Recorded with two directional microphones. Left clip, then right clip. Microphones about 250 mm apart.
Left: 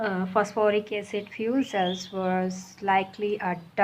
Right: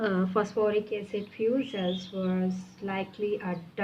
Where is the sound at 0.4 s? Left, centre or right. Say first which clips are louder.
Left 3 dB; centre.